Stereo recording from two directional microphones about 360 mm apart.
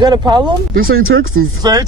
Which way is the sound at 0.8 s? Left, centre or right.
Right.